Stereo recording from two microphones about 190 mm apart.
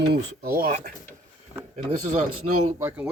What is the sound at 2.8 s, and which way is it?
Speech, 10° right (ahead or behind).